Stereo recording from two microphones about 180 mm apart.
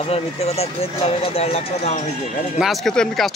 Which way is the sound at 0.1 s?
35° left (ahead or behind).